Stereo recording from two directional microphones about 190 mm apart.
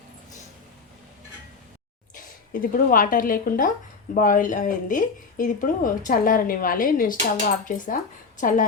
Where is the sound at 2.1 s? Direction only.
45° left (ahead or behind).